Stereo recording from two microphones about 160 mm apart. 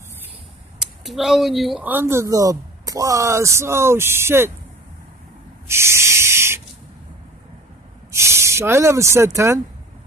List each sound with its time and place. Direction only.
0.7 s speech: centre (ahead or behind)
5.7 s snake: 15° right (ahead or behind)
8.1 s speech: 15° right (ahead or behind)